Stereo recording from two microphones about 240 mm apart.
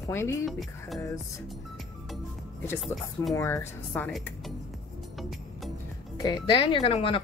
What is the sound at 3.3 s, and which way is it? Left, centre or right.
Speech, centre.